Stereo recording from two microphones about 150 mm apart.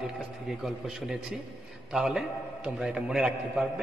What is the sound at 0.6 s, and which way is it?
A man's voice, centre (ahead or behind).